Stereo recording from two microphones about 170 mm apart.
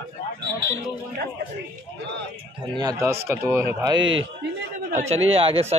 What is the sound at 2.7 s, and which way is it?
A man's voice, 20° right (ahead or behind).